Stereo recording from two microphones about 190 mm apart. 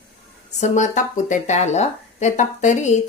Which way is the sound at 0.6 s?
40° left (ahead or behind).